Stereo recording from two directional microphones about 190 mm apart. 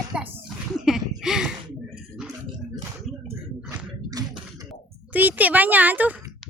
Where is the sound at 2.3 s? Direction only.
20° right (ahead or behind).